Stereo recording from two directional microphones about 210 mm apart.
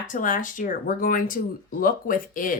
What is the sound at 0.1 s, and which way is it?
A woman's voice, 40° left (ahead or behind).